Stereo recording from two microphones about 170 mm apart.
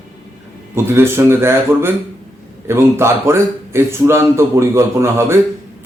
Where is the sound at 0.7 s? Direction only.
15° right (ahead or behind).